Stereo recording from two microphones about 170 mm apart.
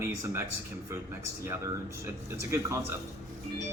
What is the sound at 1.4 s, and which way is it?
Speech, 15° right (ahead or behind).